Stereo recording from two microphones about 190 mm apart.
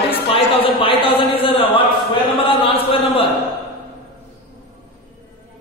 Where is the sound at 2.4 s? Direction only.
30° left (ahead or behind).